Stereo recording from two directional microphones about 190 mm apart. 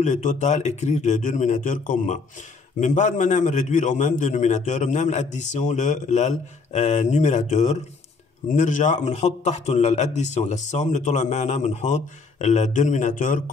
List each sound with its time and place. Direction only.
0.0 s a man's voice: 40° left (ahead or behind)